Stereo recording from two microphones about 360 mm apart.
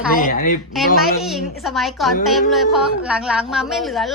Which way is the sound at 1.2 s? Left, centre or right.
Centre.